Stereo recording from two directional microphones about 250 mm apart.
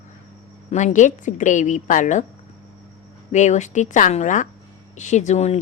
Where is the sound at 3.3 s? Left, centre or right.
Left.